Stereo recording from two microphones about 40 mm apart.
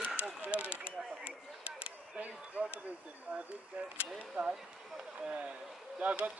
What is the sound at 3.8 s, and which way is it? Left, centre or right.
Speech, right.